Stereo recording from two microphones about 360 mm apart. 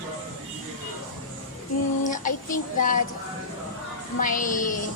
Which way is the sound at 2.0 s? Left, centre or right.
Left.